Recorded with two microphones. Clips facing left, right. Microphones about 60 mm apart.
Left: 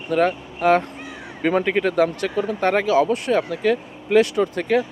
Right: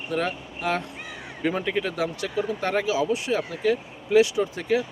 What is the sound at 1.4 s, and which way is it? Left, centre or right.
Speech, left.